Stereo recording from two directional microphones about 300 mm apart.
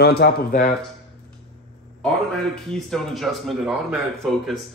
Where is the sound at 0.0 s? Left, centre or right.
Left.